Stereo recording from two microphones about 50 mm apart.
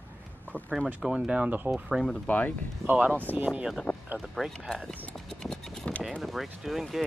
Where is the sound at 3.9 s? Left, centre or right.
Left.